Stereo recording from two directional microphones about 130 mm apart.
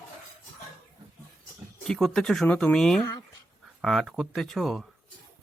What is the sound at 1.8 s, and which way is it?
Speech, 5° left (ahead or behind).